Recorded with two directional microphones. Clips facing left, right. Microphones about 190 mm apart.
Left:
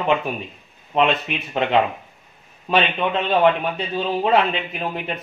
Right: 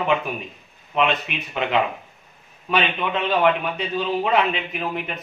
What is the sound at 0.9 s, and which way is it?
Speech, 35° left (ahead or behind).